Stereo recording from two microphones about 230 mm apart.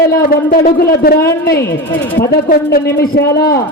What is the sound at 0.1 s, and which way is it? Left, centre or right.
A man's voice, left.